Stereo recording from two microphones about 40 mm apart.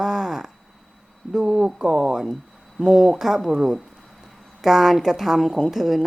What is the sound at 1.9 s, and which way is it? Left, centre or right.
Speech, centre.